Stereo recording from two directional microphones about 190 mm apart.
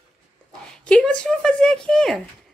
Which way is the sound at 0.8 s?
5° left (ahead or behind).